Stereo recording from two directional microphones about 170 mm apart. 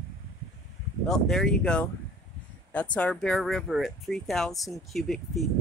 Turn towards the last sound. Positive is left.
turn(degrees=0)  # may be behind; listen again after turning